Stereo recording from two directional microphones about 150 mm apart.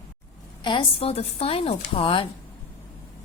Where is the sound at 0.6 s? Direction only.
35° left (ahead or behind).